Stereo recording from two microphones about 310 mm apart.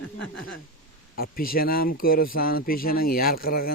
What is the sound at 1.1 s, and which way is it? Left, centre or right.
Speech, left.